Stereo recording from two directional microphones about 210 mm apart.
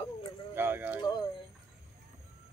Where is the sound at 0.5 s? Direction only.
10° right (ahead or behind).